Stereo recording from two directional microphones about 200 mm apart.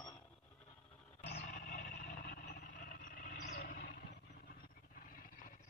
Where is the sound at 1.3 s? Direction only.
35° left (ahead or behind).